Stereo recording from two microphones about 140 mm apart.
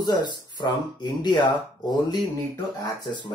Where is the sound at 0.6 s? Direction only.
30° left (ahead or behind).